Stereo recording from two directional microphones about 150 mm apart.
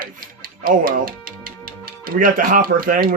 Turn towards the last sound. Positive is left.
turn(degrees=-70)  # may be behind; listen again after turning